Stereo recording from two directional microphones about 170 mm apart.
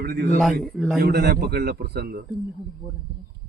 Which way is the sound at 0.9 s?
65° right (ahead or behind).